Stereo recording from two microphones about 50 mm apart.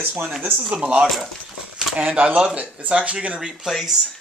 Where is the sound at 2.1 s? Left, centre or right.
Right.